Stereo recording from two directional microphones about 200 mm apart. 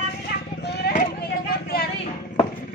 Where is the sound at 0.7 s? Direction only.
55° left (ahead or behind).